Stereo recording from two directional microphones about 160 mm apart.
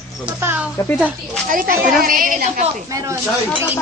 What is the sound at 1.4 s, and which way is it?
A woman's voice, 60° right (ahead or behind).